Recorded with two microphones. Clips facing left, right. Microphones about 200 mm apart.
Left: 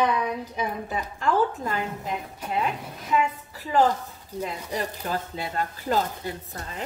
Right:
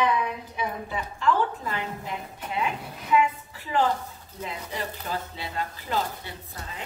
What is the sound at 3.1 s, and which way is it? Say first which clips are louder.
Speech: right 2 dB; 40° left (ahead or behind).